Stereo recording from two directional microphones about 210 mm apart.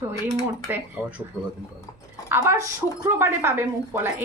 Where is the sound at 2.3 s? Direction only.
15° right (ahead or behind).